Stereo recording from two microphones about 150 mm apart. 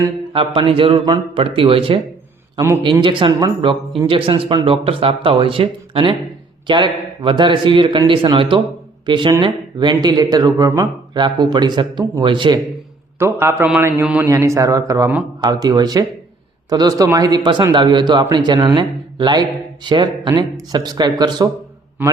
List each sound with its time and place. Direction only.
0.0 s speech: 35° right (ahead or behind)
2.6 s a man's voice: 20° right (ahead or behind)
3.0 s a man's voice: 35° right (ahead or behind)
13.1 s a man's voice: 15° right (ahead or behind)